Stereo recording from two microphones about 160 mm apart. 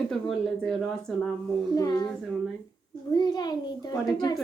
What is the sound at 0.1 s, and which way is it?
Speech, centre (ahead or behind).